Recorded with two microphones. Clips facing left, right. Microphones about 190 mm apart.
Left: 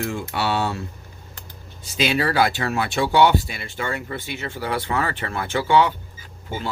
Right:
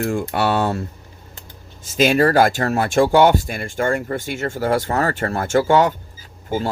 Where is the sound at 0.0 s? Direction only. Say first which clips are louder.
Right 5 dB; 50° right (ahead or behind).